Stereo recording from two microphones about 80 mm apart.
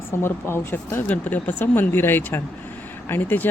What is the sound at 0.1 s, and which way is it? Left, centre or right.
Speech, left.